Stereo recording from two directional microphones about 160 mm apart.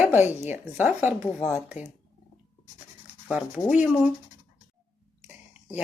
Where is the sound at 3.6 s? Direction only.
5° right (ahead or behind).